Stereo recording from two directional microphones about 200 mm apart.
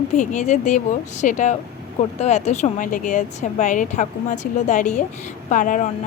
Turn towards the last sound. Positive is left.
turn(degrees=40)  # may be behind; listen again after turning